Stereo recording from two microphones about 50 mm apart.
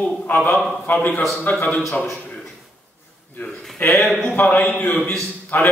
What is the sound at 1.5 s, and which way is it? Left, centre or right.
Speech, left.